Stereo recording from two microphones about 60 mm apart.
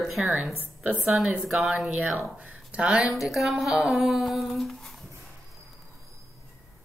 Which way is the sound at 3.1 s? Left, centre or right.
Centre.